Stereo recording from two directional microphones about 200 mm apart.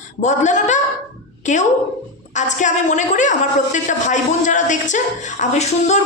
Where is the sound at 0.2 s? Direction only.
35° left (ahead or behind).